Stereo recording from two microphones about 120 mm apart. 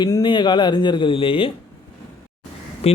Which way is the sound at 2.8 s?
60° left (ahead or behind).